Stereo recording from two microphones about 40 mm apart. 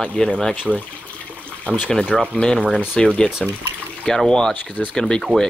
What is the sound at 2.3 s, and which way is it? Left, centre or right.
Speech, centre.